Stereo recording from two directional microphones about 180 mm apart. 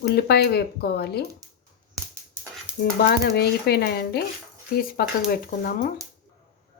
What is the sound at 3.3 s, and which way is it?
A woman's voice, 65° left (ahead or behind).